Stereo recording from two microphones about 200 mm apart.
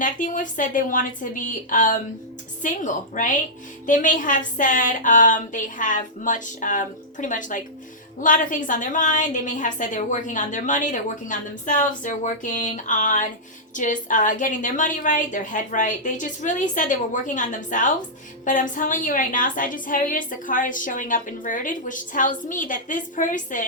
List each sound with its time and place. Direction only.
0.0 s a woman's voice: 40° left (ahead or behind)